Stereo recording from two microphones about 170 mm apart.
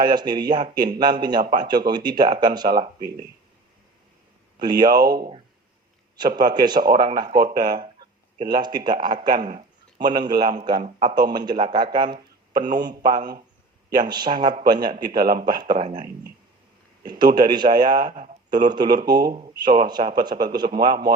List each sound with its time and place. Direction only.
0.0 s speech: 25° right (ahead or behind)
4.6 s speech: 25° right (ahead or behind)
17.0 s speech: 25° right (ahead or behind)